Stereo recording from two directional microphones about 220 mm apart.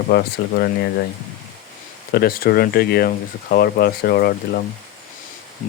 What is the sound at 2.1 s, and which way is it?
Speech, 45° left (ahead or behind).